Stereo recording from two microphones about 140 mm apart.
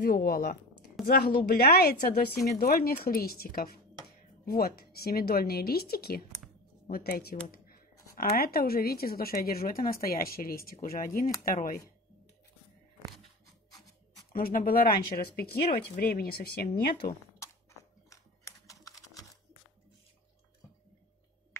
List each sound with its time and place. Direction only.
0.0 s speech: 90° left
14.3 s speech: 90° left
18.1 s camera: 25° left (ahead or behind)